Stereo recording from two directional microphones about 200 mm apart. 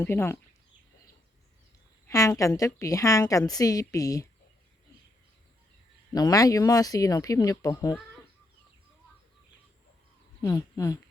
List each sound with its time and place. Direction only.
0.0 s a woman's voice: 10° left (ahead or behind)
2.0 s a woman's voice: 15° left (ahead or behind)
6.1 s a woman's voice: 20° left (ahead or behind)
10.4 s speech: 15° left (ahead or behind)